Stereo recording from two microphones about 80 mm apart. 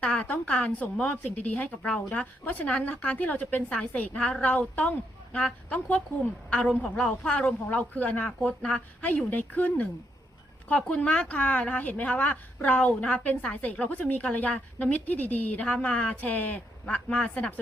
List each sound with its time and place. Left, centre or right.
0.0 s a woman's voice: centre